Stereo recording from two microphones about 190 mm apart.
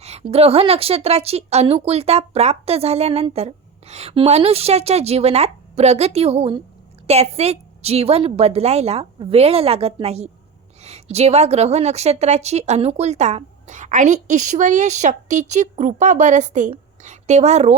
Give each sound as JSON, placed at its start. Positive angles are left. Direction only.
{"t": 0.0, "sound": "a woman's voice", "side_deg": -35}